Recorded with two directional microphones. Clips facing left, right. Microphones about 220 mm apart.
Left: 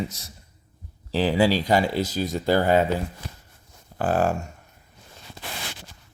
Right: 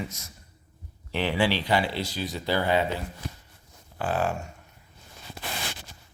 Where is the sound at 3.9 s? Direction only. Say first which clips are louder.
Left 5 dB; 45° left (ahead or behind).